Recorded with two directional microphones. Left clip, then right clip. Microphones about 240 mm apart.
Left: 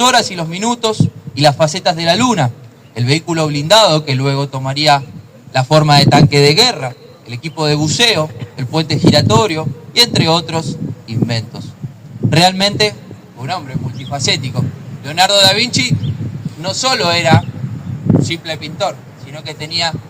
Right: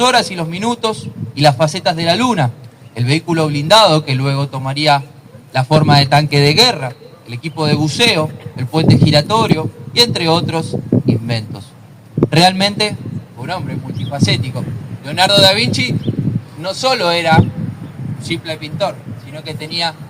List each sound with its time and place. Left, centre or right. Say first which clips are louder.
0.0 s a man's voice: left 1 dB; left